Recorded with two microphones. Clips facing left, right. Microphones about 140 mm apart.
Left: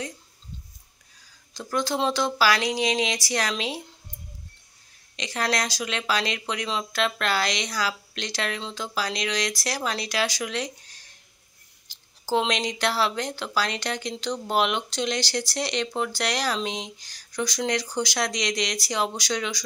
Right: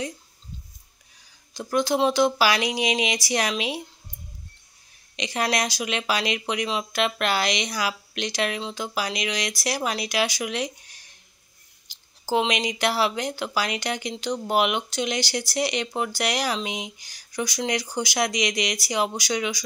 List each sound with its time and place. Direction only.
1.5 s speech: 15° right (ahead or behind)
5.1 s speech: 15° right (ahead or behind)